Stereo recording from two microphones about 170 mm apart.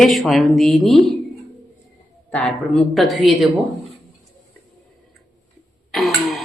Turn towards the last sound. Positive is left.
turn(degrees=0)  # may be behind; listen again after turning